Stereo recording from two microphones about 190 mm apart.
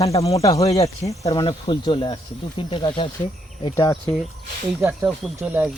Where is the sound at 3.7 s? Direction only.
15° left (ahead or behind).